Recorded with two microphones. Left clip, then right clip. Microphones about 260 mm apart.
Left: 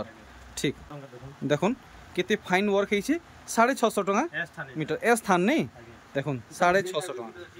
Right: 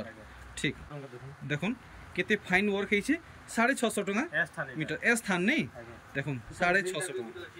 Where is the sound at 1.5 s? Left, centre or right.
Centre.